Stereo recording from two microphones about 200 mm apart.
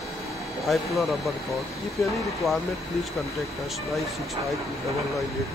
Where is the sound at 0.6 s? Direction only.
Centre (ahead or behind).